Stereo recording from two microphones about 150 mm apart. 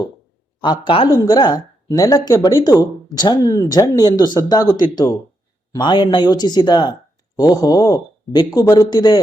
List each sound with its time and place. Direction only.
0.6 s a woman's voice: 30° left (ahead or behind)